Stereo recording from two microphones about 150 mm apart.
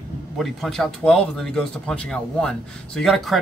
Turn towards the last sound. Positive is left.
turn(degrees=0)  # may be behind; listen again after turning